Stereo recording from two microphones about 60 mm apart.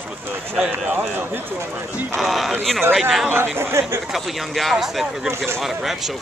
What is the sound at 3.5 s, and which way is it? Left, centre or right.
Speech, right.